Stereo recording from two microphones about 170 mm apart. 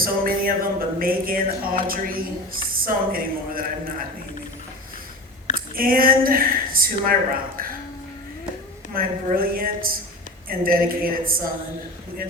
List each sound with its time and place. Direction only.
0.0 s speech: 60° right (ahead or behind)
5.5 s a woman's voice: 55° right (ahead or behind)
9.0 s speech: 60° right (ahead or behind)